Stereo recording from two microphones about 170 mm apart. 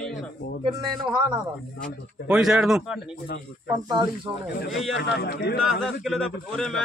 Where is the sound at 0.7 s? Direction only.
25° right (ahead or behind).